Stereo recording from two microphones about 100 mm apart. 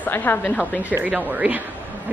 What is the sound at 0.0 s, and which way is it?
Speech, 20° left (ahead or behind).